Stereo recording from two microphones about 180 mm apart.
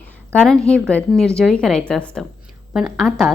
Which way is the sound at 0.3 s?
5° left (ahead or behind).